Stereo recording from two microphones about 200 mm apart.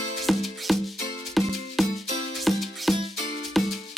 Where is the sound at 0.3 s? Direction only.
Centre (ahead or behind).